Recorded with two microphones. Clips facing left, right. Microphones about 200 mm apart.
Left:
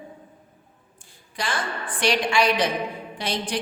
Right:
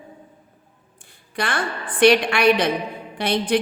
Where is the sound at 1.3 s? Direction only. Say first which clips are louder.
Right 4 dB; 60° right (ahead or behind).